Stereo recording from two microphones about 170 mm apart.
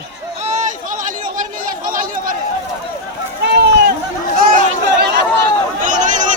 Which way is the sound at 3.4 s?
80° right.